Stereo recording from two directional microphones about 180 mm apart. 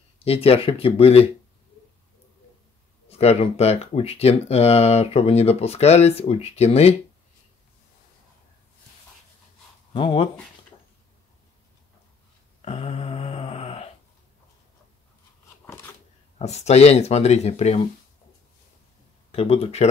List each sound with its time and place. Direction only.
0.2 s speech: 35° left (ahead or behind)
3.1 s speech: 35° left (ahead or behind)
9.9 s speech: 30° left (ahead or behind)
12.6 s mantra: 35° left (ahead or behind)
16.3 s speech: 35° left (ahead or behind)
19.3 s speech: 35° left (ahead or behind)